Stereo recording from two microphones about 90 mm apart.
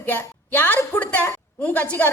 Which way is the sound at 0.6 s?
20° left (ahead or behind).